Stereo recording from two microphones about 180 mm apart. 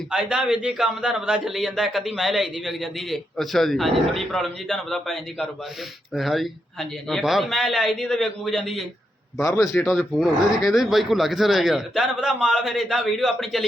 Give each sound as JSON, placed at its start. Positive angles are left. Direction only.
{"t": 0.1, "sound": "a man's voice", "side_deg": -5}
{"t": 9.4, "sound": "a man's voice", "side_deg": 15}
{"t": 9.8, "sound": "a man's voice", "side_deg": 0}